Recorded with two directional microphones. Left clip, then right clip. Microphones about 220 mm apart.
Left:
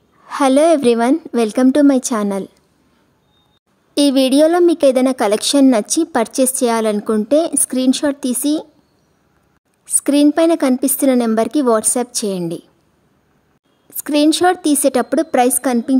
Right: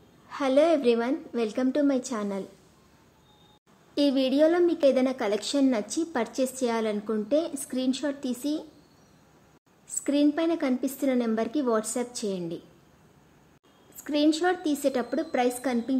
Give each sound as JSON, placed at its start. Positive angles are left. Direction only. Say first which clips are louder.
{"t": 0.3, "sound": "a woman's voice", "louder": "left 10 dB", "side_deg": 50}
{"t": 3.9, "sound": "a woman's voice", "louder": "left 11 dB", "side_deg": 50}
{"t": 10.0, "sound": "a woman's voice", "louder": "left 12 dB", "side_deg": 50}
{"t": 13.9, "sound": "a woman's voice", "louder": "left 11 dB", "side_deg": 50}